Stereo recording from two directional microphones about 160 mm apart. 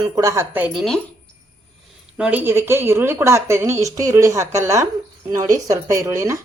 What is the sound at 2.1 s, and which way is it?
Speech, 10° right (ahead or behind).